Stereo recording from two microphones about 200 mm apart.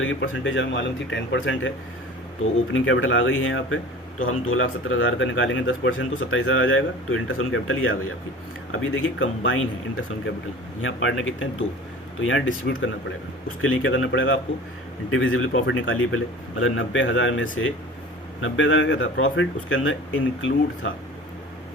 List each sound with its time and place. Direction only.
0.0 s speech: 70° left (ahead or behind)
2.7 s a man's voice: 80° left
10.8 s speech: 75° left (ahead or behind)
13.6 s speech: 85° left
15.1 s a man's voice: 90° left